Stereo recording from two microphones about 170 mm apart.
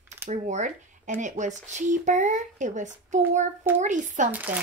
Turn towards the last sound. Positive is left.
turn(degrees=-10)  # may be behind; listen again after turning